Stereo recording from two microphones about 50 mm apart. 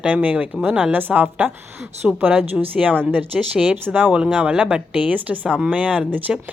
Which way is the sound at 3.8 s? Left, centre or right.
Right.